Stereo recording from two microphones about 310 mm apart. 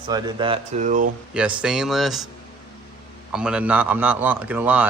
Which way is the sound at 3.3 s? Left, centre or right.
Centre.